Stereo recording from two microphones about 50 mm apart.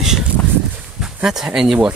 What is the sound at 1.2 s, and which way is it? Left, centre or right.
Speech, centre.